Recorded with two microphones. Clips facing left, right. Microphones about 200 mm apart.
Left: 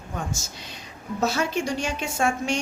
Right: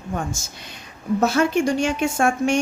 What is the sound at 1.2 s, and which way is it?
Speech, 55° right (ahead or behind).